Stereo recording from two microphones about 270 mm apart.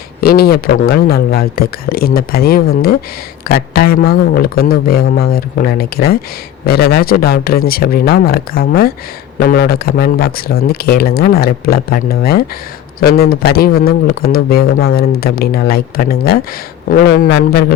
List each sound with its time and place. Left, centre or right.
0.2 s speech: left